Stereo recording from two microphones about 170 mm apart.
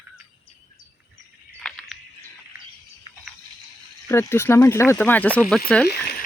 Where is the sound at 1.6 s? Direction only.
5° left (ahead or behind).